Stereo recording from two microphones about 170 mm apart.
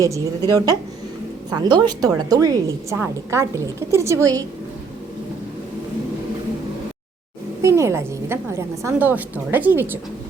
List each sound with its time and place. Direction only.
0.0 s a woman's voice: 20° right (ahead or behind)
7.6 s a woman's voice: 15° right (ahead or behind)